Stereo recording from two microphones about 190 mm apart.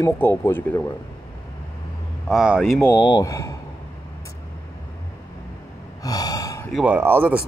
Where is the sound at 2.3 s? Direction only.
5° right (ahead or behind).